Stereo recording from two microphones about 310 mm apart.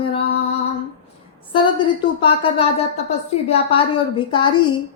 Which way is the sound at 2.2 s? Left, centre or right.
Centre.